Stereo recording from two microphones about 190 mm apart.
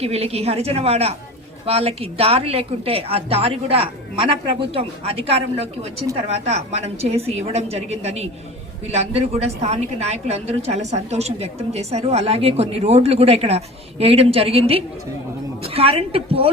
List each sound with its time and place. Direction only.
0.0 s a woman's voice: 30° right (ahead or behind)